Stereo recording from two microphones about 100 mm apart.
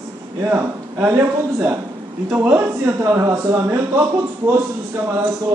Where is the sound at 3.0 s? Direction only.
30° right (ahead or behind).